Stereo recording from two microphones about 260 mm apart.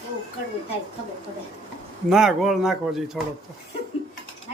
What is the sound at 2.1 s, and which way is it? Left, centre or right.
A man's voice, centre.